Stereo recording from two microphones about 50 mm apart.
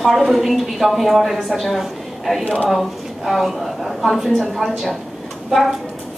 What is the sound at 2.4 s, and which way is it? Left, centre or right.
Speech, left.